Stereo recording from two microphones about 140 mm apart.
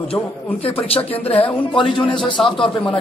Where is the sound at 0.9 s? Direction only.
45° left (ahead or behind).